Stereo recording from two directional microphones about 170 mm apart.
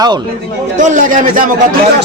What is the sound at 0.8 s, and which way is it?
Speech, 50° right (ahead or behind).